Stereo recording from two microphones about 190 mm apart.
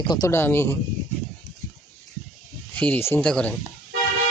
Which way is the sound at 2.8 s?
10° left (ahead or behind).